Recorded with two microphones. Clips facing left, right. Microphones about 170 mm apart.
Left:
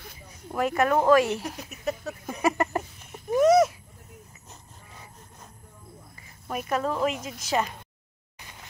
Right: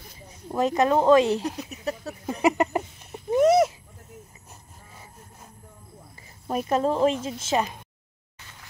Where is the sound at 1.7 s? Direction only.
35° right (ahead or behind).